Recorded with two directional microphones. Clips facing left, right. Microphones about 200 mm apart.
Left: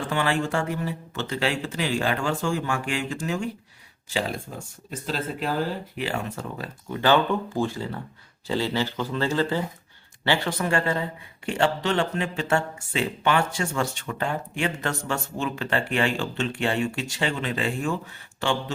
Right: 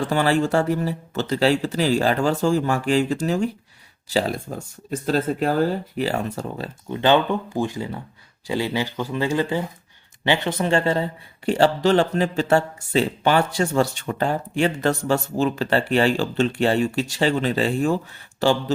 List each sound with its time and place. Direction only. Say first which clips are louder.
0.1 s speech: right 5 dB; 40° right (ahead or behind)
6.9 s speech: right 3 dB; 20° right (ahead or behind); by 18.5 s 35° right (ahead or behind)